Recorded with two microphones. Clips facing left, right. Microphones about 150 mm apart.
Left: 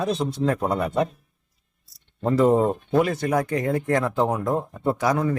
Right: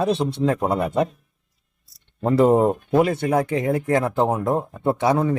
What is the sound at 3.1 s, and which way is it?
A man's voice, 25° right (ahead or behind).